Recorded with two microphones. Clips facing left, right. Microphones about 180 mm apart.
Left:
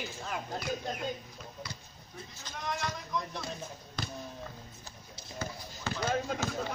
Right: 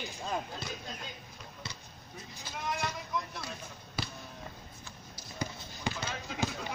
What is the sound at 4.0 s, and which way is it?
Basketball bounce, 5° right (ahead or behind).